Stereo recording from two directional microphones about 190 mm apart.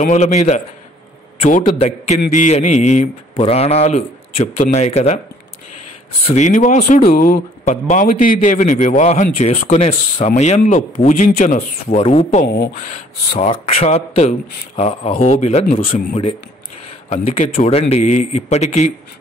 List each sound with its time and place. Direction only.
0.0 s speech: 35° left (ahead or behind)
6.2 s speech: 35° left (ahead or behind)
17.1 s speech: 35° left (ahead or behind)